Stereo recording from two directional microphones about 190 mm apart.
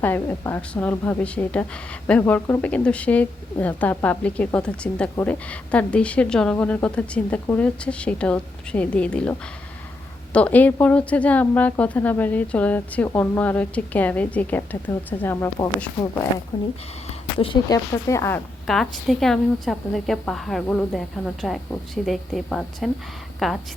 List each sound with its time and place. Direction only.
0.0 s a woman's voice: 10° left (ahead or behind)
10.3 s a woman's voice: 10° left (ahead or behind)
17.1 s speech: 30° left (ahead or behind)
18.6 s a woman's voice: centre (ahead or behind)